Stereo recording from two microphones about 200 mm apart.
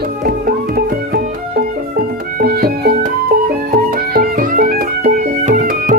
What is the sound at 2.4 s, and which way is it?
Music, 50° right (ahead or behind).